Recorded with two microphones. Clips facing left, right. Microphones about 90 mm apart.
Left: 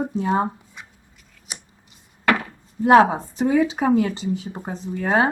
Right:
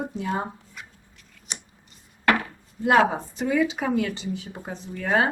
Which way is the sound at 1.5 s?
5° left (ahead or behind).